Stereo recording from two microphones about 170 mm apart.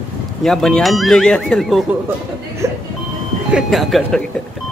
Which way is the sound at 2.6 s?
15° right (ahead or behind).